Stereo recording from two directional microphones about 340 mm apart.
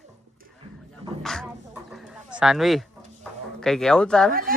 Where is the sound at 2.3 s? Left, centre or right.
Centre.